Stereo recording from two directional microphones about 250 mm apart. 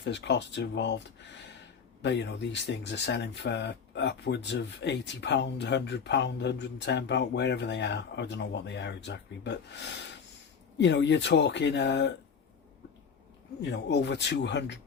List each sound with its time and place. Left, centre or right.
0.0 s speech: left
13.6 s speech: left